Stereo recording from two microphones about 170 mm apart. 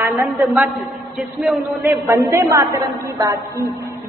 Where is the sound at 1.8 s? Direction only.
20° right (ahead or behind).